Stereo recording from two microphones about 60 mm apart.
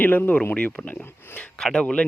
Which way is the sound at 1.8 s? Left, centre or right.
Left.